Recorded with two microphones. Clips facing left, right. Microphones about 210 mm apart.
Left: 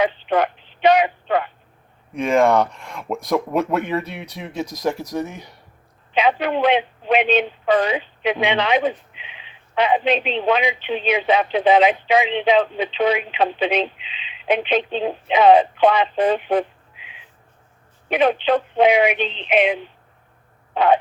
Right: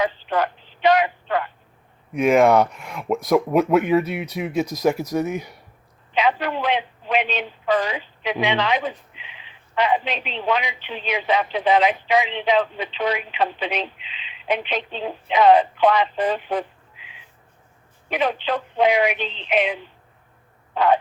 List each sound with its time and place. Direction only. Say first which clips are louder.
0.0 s a sound: left 3 dB; 20° left (ahead or behind)
2.1 s speech: right 1 dB; 5° right (ahead or behind)
6.1 s a man's voice: left 3 dB; 20° left (ahead or behind)